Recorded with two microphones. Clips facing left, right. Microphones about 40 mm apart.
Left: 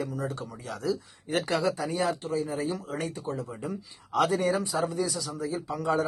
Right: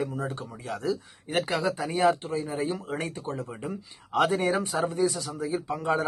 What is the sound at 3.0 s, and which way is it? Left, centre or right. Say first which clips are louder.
A man's voice: even; right.